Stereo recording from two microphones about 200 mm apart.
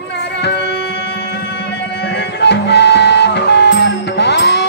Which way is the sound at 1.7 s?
60° left (ahead or behind).